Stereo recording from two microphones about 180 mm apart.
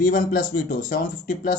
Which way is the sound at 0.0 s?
50° left (ahead or behind).